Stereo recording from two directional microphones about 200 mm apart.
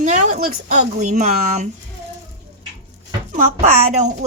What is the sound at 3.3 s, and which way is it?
Speech, 35° right (ahead or behind).